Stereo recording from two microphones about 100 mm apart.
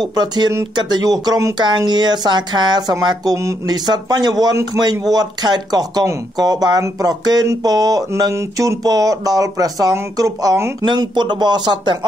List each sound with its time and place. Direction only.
0.0 s speech: 45° right (ahead or behind)
6.3 s a sound: 40° right (ahead or behind)
10.9 s speech: 50° right (ahead or behind)